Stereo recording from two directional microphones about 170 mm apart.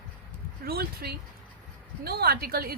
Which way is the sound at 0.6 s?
65° right (ahead or behind).